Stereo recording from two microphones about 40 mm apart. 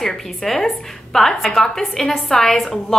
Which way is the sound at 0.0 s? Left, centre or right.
Centre.